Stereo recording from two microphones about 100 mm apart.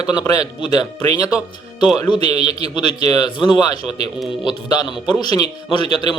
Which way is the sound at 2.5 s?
80° right.